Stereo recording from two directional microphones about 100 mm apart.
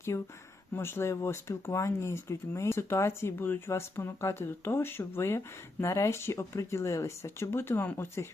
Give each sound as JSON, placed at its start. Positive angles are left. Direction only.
{"t": 0.1, "sound": "speech", "side_deg": 30}